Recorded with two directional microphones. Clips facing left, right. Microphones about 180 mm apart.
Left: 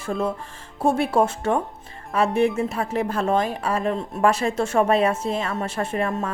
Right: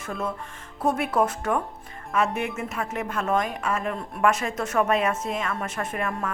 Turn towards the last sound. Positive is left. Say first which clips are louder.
# left 4 dB
turn(degrees=30)  # may be behind; listen again after turning